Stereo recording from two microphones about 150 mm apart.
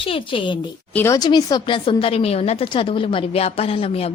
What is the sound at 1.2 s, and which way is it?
A woman's voice, 25° left (ahead or behind).